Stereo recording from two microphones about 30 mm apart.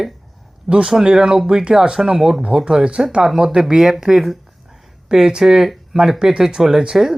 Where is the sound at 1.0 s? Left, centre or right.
Right.